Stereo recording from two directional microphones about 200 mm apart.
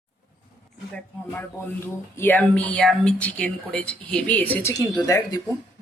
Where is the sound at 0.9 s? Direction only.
10° left (ahead or behind).